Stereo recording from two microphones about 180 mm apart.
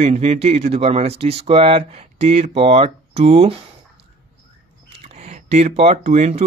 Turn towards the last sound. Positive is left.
turn(degrees=-40)  # may be behind; listen again after turning